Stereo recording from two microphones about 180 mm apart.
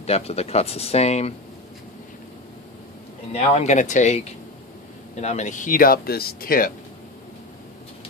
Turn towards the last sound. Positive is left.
turn(degrees=55)  # may be behind; listen again after turning